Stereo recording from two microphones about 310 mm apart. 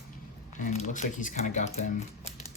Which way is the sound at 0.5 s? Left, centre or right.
Left.